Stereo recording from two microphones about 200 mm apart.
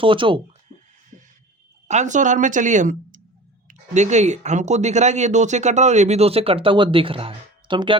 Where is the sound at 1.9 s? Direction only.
35° right (ahead or behind).